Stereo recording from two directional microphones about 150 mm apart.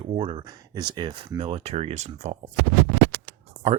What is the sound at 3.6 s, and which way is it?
Speech, 40° right (ahead or behind).